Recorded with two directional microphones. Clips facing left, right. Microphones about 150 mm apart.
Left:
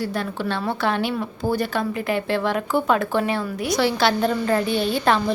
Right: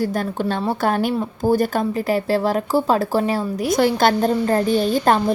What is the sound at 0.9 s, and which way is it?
A woman's voice, 45° right (ahead or behind).